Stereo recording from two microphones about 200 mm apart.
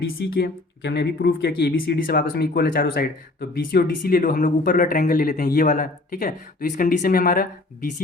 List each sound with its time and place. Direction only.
0.2 s speech: 50° left (ahead or behind)